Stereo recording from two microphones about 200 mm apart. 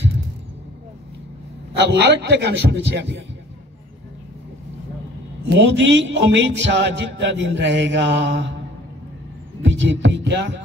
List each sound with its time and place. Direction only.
1.8 s speech: 55° right (ahead or behind)
5.5 s speech: 65° right (ahead or behind)
9.6 s heart sounds: 65° right (ahead or behind)